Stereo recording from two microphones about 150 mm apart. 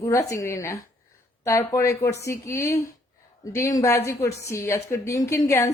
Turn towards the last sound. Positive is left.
turn(degrees=20)  # may be behind; listen again after turning